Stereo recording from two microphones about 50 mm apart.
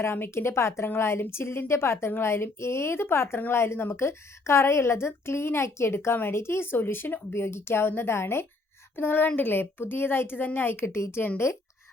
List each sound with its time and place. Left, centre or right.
0.0 s a woman's voice: left
7.4 s a woman's voice: left
9.0 s a woman's voice: left
11.4 s speech: left